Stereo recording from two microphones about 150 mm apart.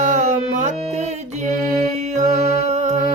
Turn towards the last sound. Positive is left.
turn(degrees=-50)  # may be behind; listen again after turning